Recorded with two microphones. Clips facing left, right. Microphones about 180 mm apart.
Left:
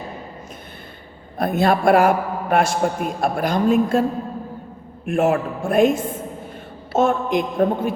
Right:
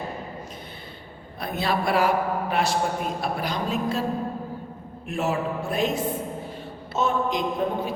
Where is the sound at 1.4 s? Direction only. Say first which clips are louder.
Left 8 dB; 50° left (ahead or behind).